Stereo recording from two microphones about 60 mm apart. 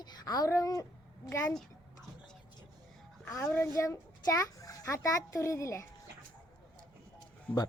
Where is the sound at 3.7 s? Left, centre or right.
Left.